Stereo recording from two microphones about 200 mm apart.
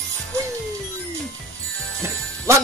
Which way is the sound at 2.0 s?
15° right (ahead or behind).